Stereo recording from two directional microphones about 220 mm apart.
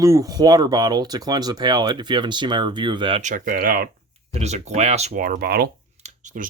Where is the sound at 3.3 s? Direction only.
40° right (ahead or behind).